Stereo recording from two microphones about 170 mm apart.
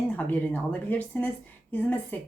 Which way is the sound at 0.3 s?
10° left (ahead or behind).